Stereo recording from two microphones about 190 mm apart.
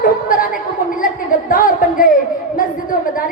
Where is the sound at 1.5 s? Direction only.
45° left (ahead or behind).